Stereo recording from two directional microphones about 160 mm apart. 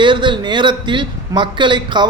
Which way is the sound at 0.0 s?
30° right (ahead or behind).